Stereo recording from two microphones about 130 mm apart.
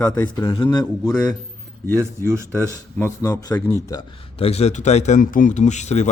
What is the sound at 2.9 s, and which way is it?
Speech, 20° left (ahead or behind).